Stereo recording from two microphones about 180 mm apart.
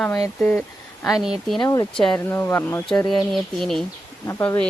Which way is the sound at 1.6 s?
20° left (ahead or behind).